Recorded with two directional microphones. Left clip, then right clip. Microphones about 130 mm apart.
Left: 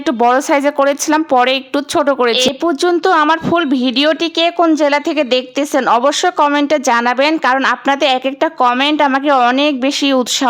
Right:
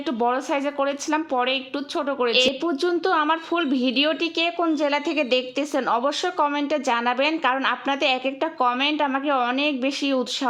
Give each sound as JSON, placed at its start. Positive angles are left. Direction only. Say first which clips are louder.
{"t": 0.2, "sound": "speech", "louder": "left 11 dB", "side_deg": 40}